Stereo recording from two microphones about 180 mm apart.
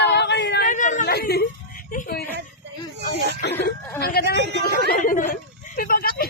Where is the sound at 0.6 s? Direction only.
45° left (ahead or behind).